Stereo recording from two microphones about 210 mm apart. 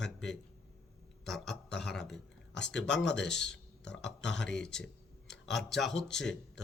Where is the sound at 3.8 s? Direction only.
55° left (ahead or behind).